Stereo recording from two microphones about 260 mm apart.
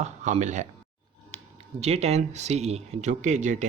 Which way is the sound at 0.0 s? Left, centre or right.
Right.